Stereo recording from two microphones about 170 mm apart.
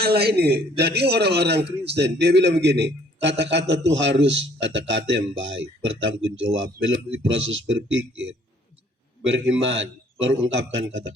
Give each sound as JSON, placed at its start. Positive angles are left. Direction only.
{"t": 0.0, "sound": "a man's voice", "side_deg": -70}
{"t": 9.2, "sound": "a man's voice", "side_deg": -90}